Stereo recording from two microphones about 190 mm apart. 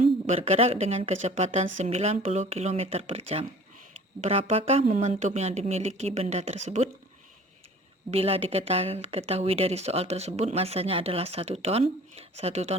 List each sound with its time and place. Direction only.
0.3 s a woman's voice: 35° right (ahead or behind)
8.1 s a woman's voice: 30° right (ahead or behind)